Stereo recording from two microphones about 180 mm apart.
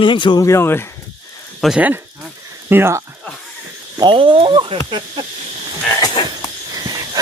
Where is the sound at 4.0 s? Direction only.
30° right (ahead or behind).